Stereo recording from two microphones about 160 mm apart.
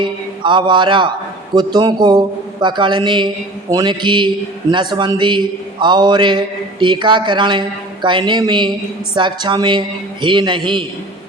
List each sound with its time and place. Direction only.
0.0 s a man's voice: 30° right (ahead or behind)